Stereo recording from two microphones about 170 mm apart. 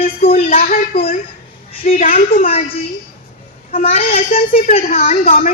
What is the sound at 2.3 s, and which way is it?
Speech, 35° left (ahead or behind).